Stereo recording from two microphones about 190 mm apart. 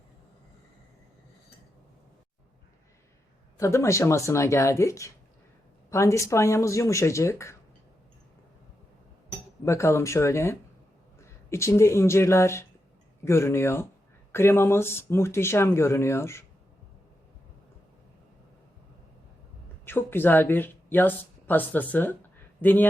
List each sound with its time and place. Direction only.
3.6 s speech: 15° left (ahead or behind)
9.6 s speech: 15° left (ahead or behind)
19.8 s speech: 10° left (ahead or behind)